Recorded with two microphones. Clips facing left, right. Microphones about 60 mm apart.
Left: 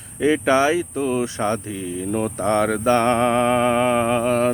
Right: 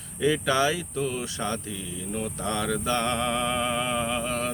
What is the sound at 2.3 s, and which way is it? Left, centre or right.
Mantra, left.